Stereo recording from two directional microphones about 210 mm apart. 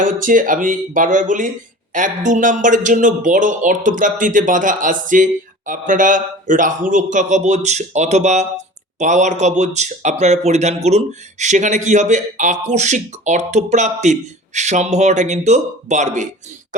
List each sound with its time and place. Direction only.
0.0 s speech: 40° right (ahead or behind)